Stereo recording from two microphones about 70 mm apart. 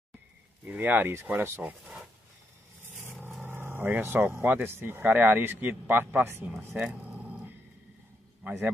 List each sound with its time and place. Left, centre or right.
0.7 s speech: right
2.8 s vehicle: right
3.4 s a man's voice: right
6.8 s a sound: right
8.5 s speech: right